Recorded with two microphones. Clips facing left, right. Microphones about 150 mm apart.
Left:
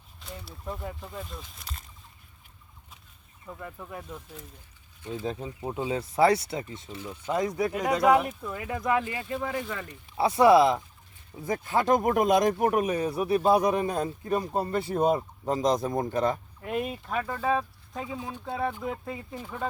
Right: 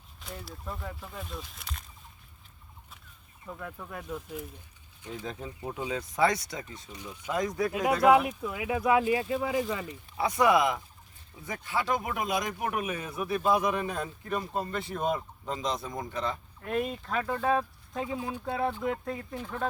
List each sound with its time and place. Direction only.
0.3 s speech: centre (ahead or behind)
0.8 s speech: 20° left (ahead or behind)
1.1 s speech: centre (ahead or behind)
3.6 s speech: 5° left (ahead or behind)
5.2 s speech: 20° left (ahead or behind)
7.7 s speech: 5° right (ahead or behind)
10.2 s speech: 30° left (ahead or behind); by 16.4 s 45° left (ahead or behind)
16.6 s speech: 10° left (ahead or behind)
17.2 s speech: centre (ahead or behind)